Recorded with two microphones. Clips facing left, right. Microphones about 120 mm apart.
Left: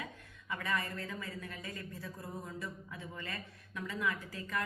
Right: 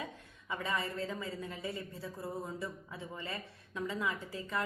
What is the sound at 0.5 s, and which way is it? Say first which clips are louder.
Speech: right 1 dB; 25° right (ahead or behind).